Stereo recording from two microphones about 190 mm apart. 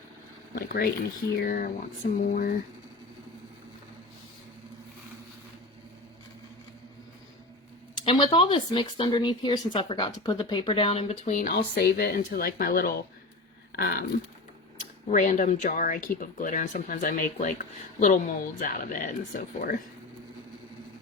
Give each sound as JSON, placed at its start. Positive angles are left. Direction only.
{"t": 0.5, "sound": "speech", "side_deg": 50}
{"t": 8.0, "sound": "speech", "side_deg": 25}
{"t": 11.3, "sound": "speech", "side_deg": 50}
{"t": 15.1, "sound": "speech", "side_deg": 40}